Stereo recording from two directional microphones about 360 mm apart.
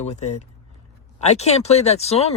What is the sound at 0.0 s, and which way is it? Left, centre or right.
Speech, centre.